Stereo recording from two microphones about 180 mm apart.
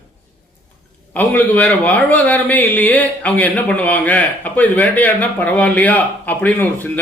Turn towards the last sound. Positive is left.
turn(degrees=10)  # may be behind; listen again after turning